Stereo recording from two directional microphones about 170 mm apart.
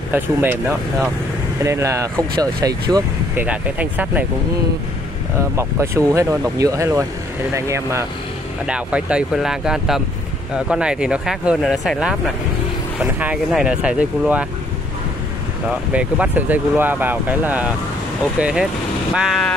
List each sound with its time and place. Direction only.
0.1 s speech: 10° right (ahead or behind)
3.4 s speech: 10° right (ahead or behind)
5.6 s speech: 15° right (ahead or behind)
8.6 s speech: 5° right (ahead or behind)
15.9 s speech: 5° right (ahead or behind)